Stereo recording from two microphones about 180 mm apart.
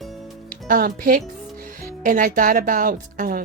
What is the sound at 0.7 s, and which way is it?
Speech, 50° right (ahead or behind).